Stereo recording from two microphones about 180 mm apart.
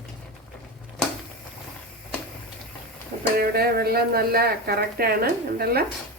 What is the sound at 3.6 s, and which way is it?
Speech, 60° right (ahead or behind).